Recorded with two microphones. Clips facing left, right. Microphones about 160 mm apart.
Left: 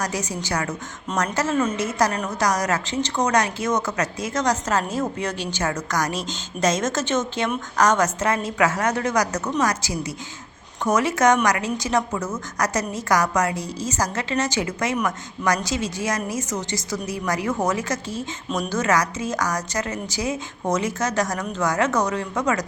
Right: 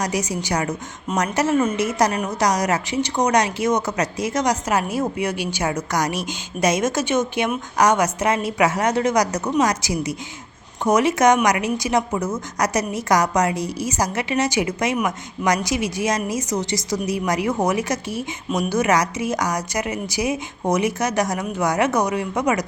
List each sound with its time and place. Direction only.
0.0 s a woman's voice: 15° right (ahead or behind)